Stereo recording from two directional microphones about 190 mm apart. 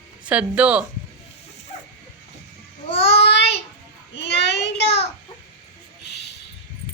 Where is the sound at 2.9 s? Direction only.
30° left (ahead or behind).